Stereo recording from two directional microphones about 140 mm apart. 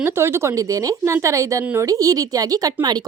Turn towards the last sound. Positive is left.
turn(degrees=-30)  # may be behind; listen again after turning